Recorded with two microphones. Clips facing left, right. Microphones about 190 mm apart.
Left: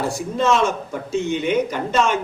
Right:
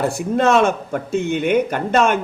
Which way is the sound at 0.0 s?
60° right (ahead or behind).